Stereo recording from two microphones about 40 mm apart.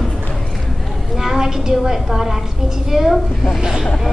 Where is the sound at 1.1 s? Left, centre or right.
Centre.